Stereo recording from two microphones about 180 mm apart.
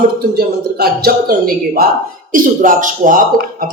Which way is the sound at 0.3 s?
60° right (ahead or behind).